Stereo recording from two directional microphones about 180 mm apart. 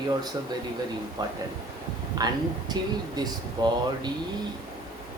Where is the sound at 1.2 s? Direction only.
20° right (ahead or behind).